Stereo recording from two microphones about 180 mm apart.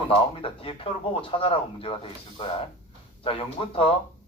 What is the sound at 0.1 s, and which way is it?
A man's voice, 30° left (ahead or behind).